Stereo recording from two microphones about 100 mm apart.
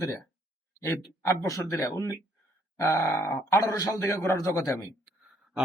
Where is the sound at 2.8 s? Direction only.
30° left (ahead or behind).